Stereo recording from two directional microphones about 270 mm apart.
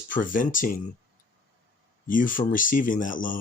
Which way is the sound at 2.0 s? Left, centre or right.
Left.